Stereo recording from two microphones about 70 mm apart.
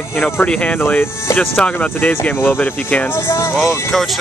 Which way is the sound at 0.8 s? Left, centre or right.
Left.